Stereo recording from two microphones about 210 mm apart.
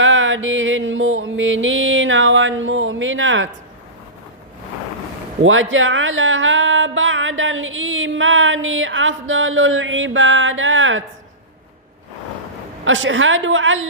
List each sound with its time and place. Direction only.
0.0 s music: 65° right (ahead or behind)
5.4 s speech: 70° right (ahead or behind)
12.8 s music: 65° right (ahead or behind)